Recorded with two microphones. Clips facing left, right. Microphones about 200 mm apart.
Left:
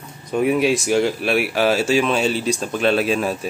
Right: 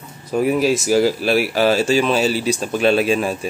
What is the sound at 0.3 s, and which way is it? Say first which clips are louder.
Speech: right 1 dB; centre (ahead or behind).